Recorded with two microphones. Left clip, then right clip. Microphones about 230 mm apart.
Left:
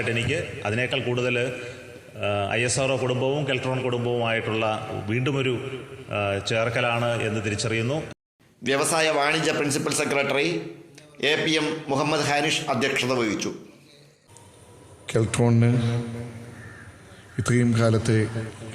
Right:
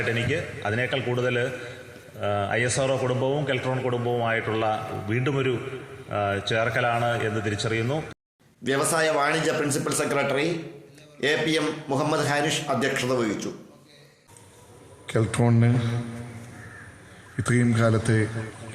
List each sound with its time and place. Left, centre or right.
0.0 s a man's voice: left
8.6 s a man's voice: centre
15.0 s speech: left
17.3 s speech: left